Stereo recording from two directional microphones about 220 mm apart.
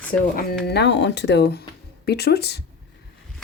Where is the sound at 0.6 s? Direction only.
50° left (ahead or behind).